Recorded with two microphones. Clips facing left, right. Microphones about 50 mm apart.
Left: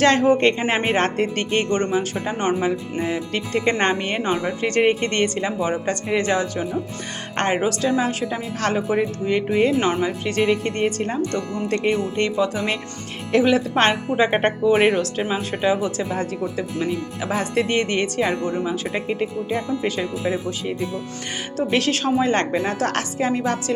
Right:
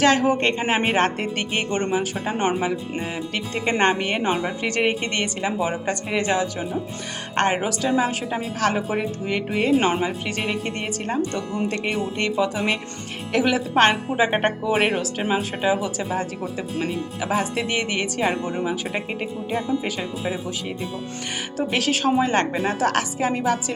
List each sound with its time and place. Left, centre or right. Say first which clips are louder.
0.0 s speech: left 2 dB; centre
11.2 s speech: left 1 dB; centre
11.7 s speech: left 4 dB; centre
14.8 s speech: left 3 dB; centre
16.7 s speech: left 1 dB; right
17.2 s speech: left 1 dB; centre
18.3 s speech: left 1 dB; centre
21.7 s speech: left 1 dB; centre